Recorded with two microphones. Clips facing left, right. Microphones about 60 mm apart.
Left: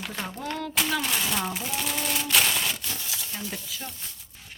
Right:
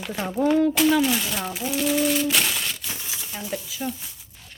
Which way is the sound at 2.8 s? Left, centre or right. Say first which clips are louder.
Right 1 dB; right.